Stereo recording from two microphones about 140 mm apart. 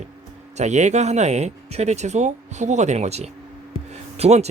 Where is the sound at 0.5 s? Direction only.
55° right (ahead or behind).